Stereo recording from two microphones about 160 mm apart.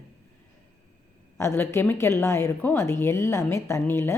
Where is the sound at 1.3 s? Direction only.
15° left (ahead or behind).